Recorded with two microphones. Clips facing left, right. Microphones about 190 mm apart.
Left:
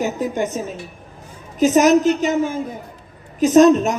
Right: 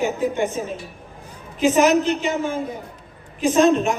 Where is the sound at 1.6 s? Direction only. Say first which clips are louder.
Left 3 dB; 45° left (ahead or behind).